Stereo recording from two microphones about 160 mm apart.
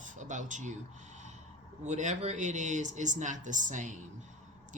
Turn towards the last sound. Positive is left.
turn(degrees=-50)  # may be behind; listen again after turning